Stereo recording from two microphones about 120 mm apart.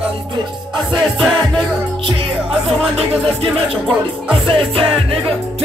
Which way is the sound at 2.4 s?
55° right (ahead or behind).